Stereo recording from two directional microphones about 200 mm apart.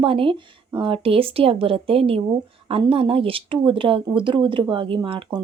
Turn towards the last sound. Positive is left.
turn(degrees=-25)  # may be behind; listen again after turning